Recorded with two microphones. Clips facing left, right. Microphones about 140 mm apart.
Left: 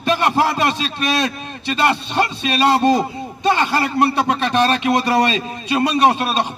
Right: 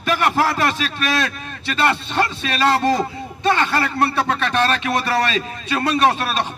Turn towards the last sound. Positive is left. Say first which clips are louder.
# left 2 dB
turn(degrees=20)  # may be behind; listen again after turning